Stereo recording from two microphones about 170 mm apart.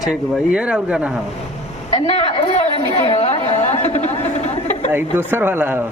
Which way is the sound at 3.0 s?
40° left (ahead or behind).